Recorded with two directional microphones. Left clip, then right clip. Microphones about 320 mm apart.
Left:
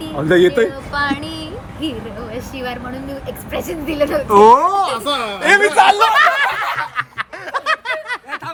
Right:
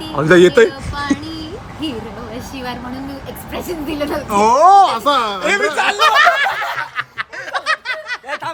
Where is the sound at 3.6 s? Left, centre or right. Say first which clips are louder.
Left 3 dB; centre.